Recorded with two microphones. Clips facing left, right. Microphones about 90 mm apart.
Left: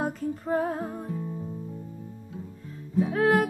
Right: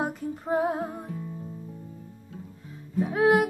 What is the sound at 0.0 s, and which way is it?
Music, 15° right (ahead or behind).